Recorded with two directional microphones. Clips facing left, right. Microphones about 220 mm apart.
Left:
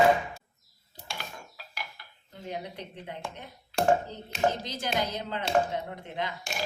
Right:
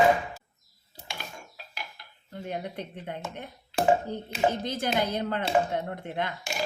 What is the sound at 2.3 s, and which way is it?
Speech, 55° right (ahead or behind).